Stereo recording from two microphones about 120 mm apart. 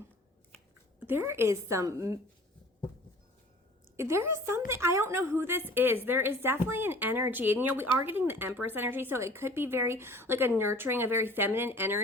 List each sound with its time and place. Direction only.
0.9 s a woman's voice: 15° right (ahead or behind)
3.9 s a woman's voice: 20° right (ahead or behind)